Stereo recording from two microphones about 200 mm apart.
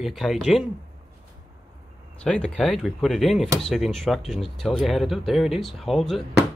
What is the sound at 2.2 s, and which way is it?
Speech, 5° left (ahead or behind).